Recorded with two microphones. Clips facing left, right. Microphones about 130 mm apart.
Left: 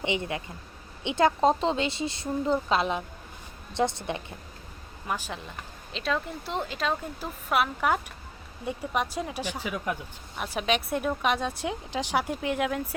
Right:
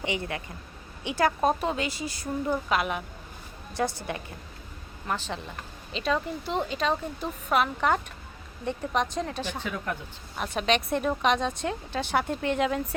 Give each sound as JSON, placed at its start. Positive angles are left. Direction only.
{"t": 0.0, "sound": "a woman's voice", "side_deg": 20}
{"t": 5.0, "sound": "speech", "side_deg": 10}
{"t": 5.9, "sound": "speech", "side_deg": 0}